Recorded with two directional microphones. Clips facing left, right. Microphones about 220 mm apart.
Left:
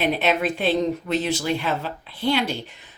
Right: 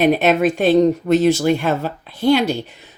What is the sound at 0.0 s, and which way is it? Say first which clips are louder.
Speech: right 7 dB; 45° right (ahead or behind).